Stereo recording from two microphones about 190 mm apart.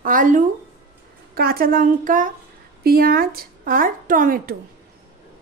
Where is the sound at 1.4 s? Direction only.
50° right (ahead or behind).